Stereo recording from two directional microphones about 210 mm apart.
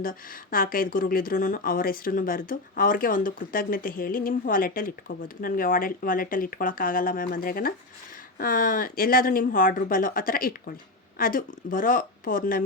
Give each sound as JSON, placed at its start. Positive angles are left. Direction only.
{"t": 0.0, "sound": "speech", "side_deg": 40}